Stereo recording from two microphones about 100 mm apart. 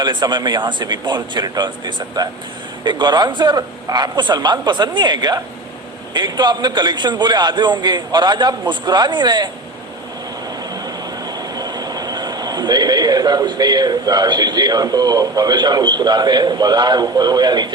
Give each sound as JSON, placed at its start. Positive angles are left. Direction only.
{"t": 0.0, "sound": "a man's voice", "side_deg": -45}
{"t": 10.8, "sound": "train", "side_deg": -40}